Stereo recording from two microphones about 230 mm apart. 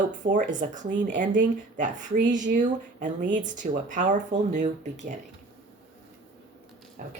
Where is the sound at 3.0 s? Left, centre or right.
Right.